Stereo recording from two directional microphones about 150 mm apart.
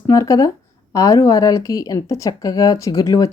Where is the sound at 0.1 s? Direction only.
20° left (ahead or behind).